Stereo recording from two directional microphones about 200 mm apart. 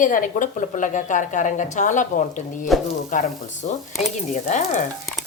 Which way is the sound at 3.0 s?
35° left (ahead or behind).